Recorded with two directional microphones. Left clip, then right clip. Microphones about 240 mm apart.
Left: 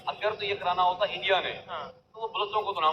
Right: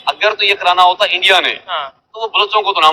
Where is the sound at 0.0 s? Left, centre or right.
Right.